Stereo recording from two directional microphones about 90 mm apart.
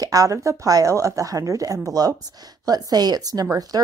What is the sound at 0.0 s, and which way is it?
Speech, 40° right (ahead or behind).